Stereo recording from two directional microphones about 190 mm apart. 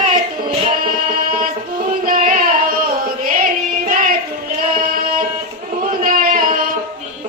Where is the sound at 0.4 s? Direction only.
45° right (ahead or behind).